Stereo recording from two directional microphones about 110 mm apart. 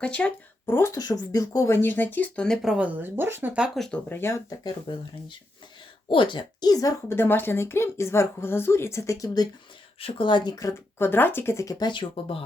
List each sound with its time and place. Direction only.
0.0 s speech: 10° left (ahead or behind)
0.6 s speech: 25° left (ahead or behind); by 2.6 s 10° left (ahead or behind)
2.6 s speech: 5° right (ahead or behind)
3.8 s speech: centre (ahead or behind)
4.1 s speech: 20° left (ahead or behind)
4.9 s speech: 45° left (ahead or behind)
6.1 s speech: 50° left (ahead or behind)
7.1 s speech: 20° left (ahead or behind); by 9.5 s 35° left (ahead or behind)
10.0 s speech: 50° left (ahead or behind); by 11.9 s 30° left (ahead or behind)
11.9 s speech: 50° left (ahead or behind)